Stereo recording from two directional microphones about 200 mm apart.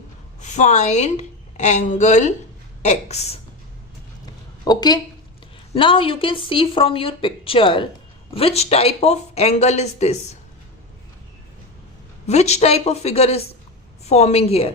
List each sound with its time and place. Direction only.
0.4 s a woman's voice: 35° left (ahead or behind)
4.6 s speech: 20° left (ahead or behind)
12.2 s speech: 35° left (ahead or behind)